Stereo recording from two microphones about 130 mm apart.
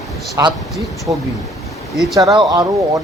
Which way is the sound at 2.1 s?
25° right (ahead or behind).